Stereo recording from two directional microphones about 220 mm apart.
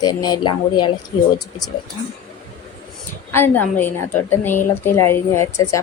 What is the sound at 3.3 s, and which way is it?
A woman's voice, 10° left (ahead or behind).